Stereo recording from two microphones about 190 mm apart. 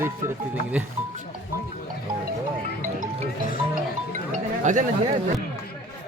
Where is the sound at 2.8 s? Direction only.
40° right (ahead or behind).